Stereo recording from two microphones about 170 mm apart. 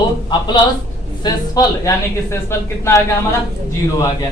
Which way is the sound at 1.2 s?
20° left (ahead or behind).